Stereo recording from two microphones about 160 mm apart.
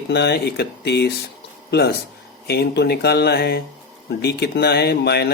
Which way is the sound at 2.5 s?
90° left.